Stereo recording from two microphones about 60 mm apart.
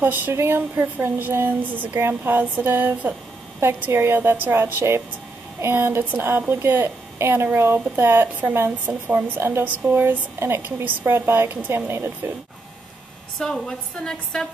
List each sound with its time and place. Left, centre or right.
0.0 s speech: right
3.6 s a woman's voice: right
13.4 s a woman's voice: centre